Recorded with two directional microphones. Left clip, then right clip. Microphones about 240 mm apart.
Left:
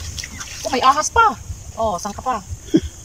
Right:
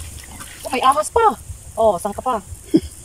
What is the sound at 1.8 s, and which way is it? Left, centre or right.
Speech, right.